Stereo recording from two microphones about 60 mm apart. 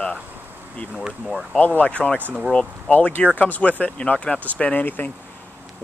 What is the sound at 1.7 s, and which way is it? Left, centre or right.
Speech, left.